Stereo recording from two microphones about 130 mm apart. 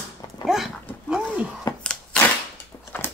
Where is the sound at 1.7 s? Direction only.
30° left (ahead or behind).